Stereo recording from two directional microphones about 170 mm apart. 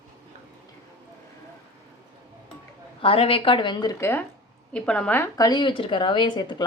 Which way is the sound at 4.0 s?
15° left (ahead or behind).